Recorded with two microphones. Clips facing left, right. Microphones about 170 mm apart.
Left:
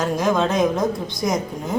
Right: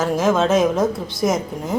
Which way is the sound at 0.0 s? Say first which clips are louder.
Right 2 dB; 5° right (ahead or behind).